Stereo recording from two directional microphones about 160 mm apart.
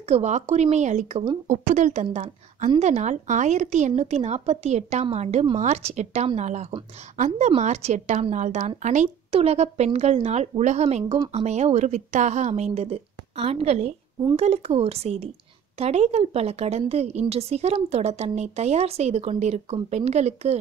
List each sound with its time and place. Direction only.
0.0 s a woman's voice: 45° right (ahead or behind)